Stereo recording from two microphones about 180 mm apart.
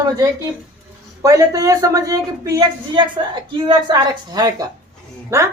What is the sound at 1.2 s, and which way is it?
Speech, 20° right (ahead or behind).